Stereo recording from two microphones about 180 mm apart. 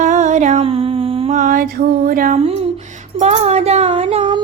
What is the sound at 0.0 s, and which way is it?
Mantra, 40° right (ahead or behind).